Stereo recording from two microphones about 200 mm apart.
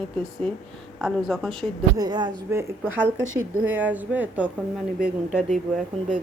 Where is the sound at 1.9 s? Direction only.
20° right (ahead or behind).